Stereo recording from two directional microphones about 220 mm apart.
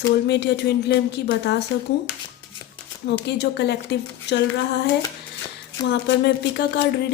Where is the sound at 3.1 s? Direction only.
50° left (ahead or behind).